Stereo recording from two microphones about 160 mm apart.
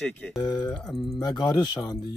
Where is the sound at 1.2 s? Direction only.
25° left (ahead or behind).